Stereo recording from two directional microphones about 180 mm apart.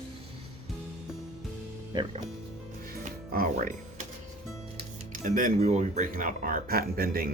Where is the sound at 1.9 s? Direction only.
25° right (ahead or behind).